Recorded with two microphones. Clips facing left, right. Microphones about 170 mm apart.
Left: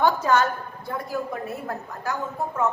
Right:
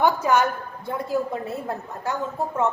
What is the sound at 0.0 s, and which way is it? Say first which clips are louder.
A woman's voice: right 1 dB; 15° right (ahead or behind).